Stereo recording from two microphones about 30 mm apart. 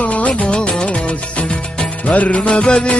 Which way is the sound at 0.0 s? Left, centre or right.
Left.